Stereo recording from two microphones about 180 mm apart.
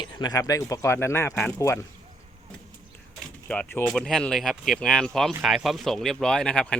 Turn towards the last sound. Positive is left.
turn(degrees=5)  # may be behind; listen again after turning